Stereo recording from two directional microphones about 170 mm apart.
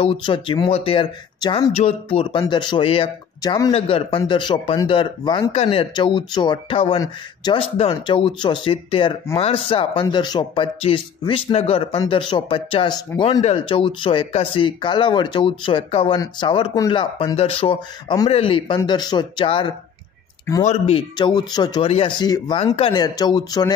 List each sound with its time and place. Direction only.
0.0 s speech: 30° left (ahead or behind)
20.6 s speech: 40° left (ahead or behind)
21.2 s speech: 25° left (ahead or behind)